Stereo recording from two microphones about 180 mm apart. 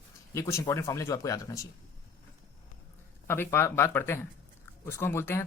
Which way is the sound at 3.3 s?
15° left (ahead or behind).